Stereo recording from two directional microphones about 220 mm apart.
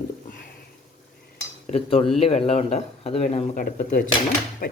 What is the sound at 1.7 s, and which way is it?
Speech, 25° left (ahead or behind).